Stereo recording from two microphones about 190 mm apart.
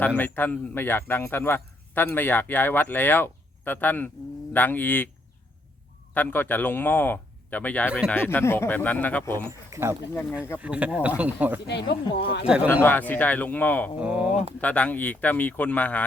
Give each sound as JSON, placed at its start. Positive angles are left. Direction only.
{"t": 0.2, "sound": "speech", "side_deg": 10}
{"t": 6.1, "sound": "speech", "side_deg": 10}
{"t": 9.5, "sound": "speech", "side_deg": -15}
{"t": 12.1, "sound": "speech", "side_deg": 60}
{"t": 12.6, "sound": "speech", "side_deg": 10}
{"t": 14.0, "sound": "speech", "side_deg": -5}
{"t": 14.6, "sound": "speech", "side_deg": 5}